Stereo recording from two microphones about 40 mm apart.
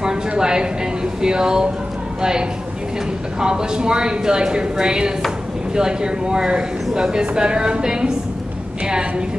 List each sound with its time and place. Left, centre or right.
0.4 s speech: centre
3.3 s speech: centre